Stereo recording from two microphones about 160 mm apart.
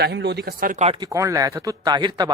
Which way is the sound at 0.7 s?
40° right (ahead or behind).